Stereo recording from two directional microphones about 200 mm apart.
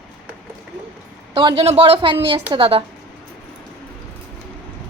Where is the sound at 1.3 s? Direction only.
25° right (ahead or behind).